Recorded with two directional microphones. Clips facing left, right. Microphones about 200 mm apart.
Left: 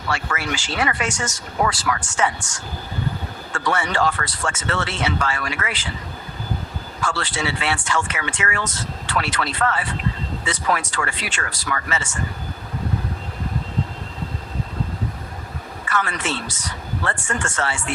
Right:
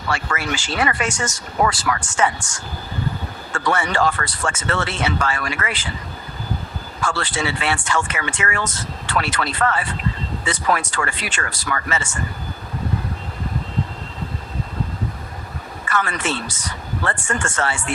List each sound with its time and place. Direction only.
0.1 s speech: 50° right (ahead or behind)
3.7 s speech: 50° right (ahead or behind)
7.0 s speech: 50° right (ahead or behind)
15.9 s speech: 50° right (ahead or behind)